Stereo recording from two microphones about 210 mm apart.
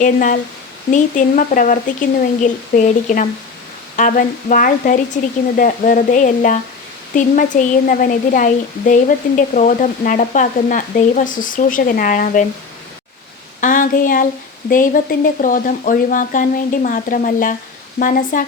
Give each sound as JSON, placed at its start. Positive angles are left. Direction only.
{"t": 0.0, "sound": "speech", "side_deg": 40}
{"t": 13.6, "sound": "speech", "side_deg": 40}